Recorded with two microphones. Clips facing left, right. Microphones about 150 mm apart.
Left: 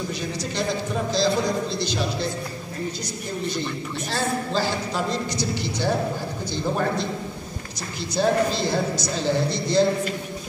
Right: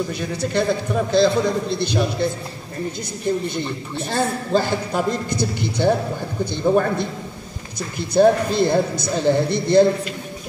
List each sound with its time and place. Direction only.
0.4 s speech: 60° right (ahead or behind)
4.1 s a man's voice: 55° right (ahead or behind)